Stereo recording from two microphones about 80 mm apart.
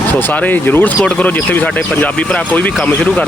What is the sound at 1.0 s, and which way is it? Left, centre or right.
A man's voice, centre.